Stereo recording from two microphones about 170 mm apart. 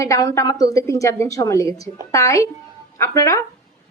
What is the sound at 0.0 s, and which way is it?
A woman's voice, 20° left (ahead or behind).